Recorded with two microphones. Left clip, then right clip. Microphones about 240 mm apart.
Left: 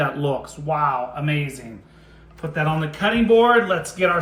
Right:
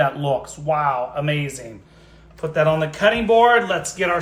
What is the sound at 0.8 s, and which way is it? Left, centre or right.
Speech, right.